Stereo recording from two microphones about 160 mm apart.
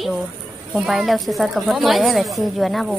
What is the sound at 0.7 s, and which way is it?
Speech, centre (ahead or behind).